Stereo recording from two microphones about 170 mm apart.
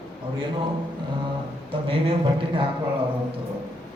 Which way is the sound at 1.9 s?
30° right (ahead or behind).